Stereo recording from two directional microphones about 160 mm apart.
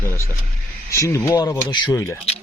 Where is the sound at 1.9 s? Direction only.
15° left (ahead or behind).